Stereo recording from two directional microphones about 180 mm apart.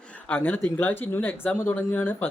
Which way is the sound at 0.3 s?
10° left (ahead or behind).